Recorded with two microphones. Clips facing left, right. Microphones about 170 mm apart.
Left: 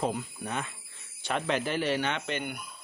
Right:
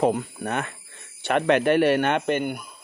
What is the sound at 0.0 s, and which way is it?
Speech, 60° right (ahead or behind).